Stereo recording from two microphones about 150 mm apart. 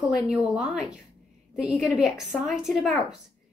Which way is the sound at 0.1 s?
5° right (ahead or behind).